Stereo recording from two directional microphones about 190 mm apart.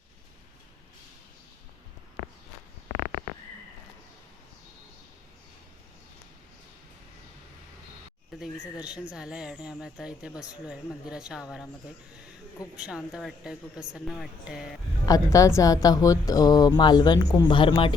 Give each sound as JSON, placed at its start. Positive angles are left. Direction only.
{"t": 8.4, "sound": "speech", "side_deg": -5}
{"t": 12.8, "sound": "speech", "side_deg": -5}
{"t": 15.0, "sound": "a woman's voice", "side_deg": 15}